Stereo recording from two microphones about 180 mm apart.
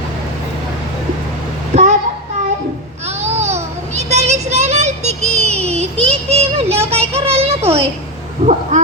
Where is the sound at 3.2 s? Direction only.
35° right (ahead or behind).